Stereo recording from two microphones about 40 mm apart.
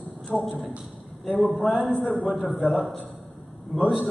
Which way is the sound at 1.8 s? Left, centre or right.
Right.